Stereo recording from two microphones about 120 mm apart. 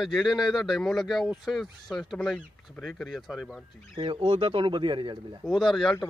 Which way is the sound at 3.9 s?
50° right (ahead or behind).